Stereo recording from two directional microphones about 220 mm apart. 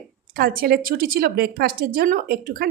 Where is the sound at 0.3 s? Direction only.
45° right (ahead or behind).